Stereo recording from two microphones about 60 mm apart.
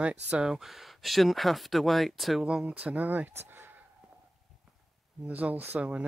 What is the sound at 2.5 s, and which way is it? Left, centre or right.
Speech, centre.